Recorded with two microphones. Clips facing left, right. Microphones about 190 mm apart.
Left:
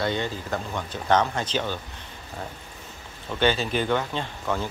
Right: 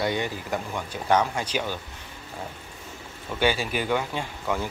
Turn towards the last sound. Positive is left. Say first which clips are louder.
# even
turn(degrees=-10)  # may be behind; listen again after turning